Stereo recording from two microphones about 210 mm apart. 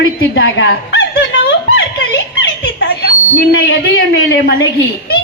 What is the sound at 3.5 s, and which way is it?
Speech, 50° left (ahead or behind).